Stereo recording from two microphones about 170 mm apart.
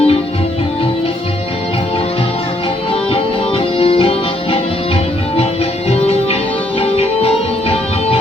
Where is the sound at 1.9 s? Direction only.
35° left (ahead or behind).